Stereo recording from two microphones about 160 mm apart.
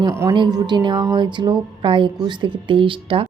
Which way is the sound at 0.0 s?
20° right (ahead or behind).